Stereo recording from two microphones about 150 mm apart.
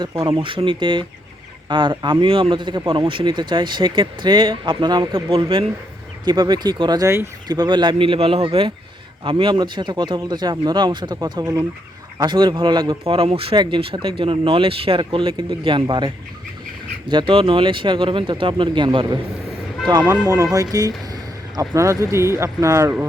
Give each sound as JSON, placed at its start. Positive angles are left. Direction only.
{"t": 0.0, "sound": "speech", "side_deg": -20}
{"t": 0.3, "sound": "speech", "side_deg": -35}
{"t": 17.1, "sound": "speech", "side_deg": -35}
{"t": 20.0, "sound": "speech", "side_deg": -15}